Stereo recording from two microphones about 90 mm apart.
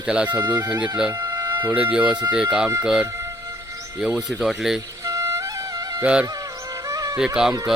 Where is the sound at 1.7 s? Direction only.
15° right (ahead or behind).